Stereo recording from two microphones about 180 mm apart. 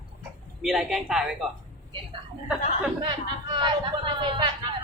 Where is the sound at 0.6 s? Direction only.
Centre (ahead or behind).